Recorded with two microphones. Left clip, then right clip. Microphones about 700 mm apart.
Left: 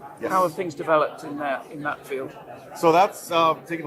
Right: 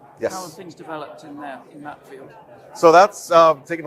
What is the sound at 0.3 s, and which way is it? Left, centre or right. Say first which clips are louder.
Speech: left 11 dB; left.